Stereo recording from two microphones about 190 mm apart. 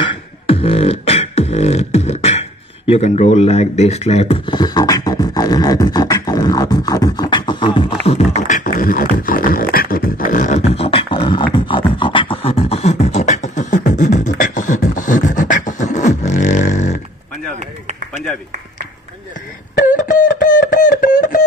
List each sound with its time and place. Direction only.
0.0 s beatboxing: 30° left (ahead or behind)
2.9 s speech: 35° left (ahead or behind)
8.4 s beatboxing: 40° left (ahead or behind)
17.6 s a sound: 35° right (ahead or behind)
19.9 s music: 40° left (ahead or behind)